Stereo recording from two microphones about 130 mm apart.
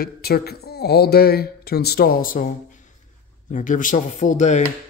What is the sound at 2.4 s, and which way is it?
Speech, 80° left.